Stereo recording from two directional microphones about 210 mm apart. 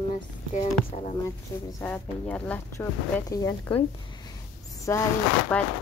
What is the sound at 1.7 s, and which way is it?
Speech, 10° left (ahead or behind).